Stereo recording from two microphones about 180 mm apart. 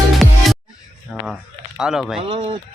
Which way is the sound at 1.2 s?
Centre (ahead or behind).